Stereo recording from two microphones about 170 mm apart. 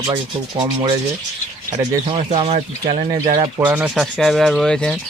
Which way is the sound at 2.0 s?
35° right (ahead or behind).